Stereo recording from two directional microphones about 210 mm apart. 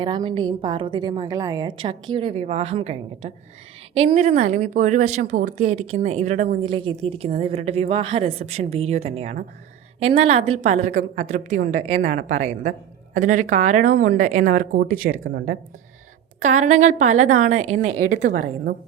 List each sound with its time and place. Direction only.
0.0 s a woman's voice: 20° right (ahead or behind); by 5.5 s 35° right (ahead or behind)
5.5 s speech: 90° right
6.0 s a woman's voice: 30° right (ahead or behind)
6.6 s a woman's voice: 25° right (ahead or behind); by 15.3 s 40° right (ahead or behind)
16.6 s a woman's voice: 35° right (ahead or behind)